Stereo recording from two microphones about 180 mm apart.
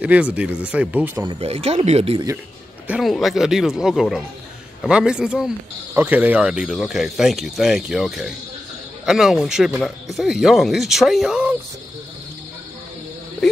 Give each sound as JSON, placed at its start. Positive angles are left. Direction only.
{"t": 0.0, "sound": "speech", "side_deg": -5}
{"t": 1.4, "sound": "speech", "side_deg": -35}
{"t": 2.9, "sound": "speech", "side_deg": 0}